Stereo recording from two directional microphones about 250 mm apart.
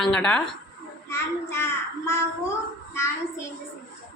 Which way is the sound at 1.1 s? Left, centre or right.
Centre.